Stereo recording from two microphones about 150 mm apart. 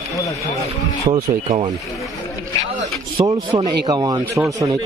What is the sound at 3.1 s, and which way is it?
Speech, 30° right (ahead or behind).